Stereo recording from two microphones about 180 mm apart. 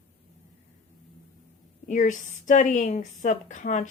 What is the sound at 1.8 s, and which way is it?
Speech, 45° left (ahead or behind).